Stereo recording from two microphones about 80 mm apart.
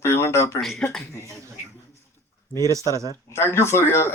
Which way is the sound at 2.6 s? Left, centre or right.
Right.